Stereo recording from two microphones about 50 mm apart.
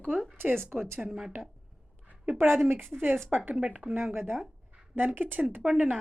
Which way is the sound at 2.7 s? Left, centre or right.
Right.